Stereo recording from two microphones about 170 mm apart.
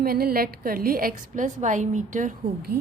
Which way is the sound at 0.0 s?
60° right (ahead or behind).